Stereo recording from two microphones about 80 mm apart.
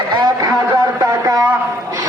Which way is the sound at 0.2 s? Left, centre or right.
Right.